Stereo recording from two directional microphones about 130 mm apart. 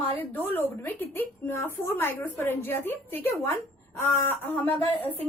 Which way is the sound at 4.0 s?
20° left (ahead or behind).